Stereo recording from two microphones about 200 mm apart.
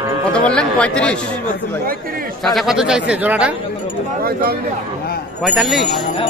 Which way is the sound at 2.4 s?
Centre (ahead or behind).